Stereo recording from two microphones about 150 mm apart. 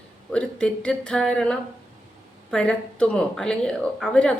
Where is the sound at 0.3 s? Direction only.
5° left (ahead or behind).